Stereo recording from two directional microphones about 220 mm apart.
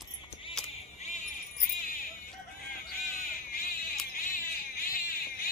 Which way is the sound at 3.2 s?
40° left (ahead or behind).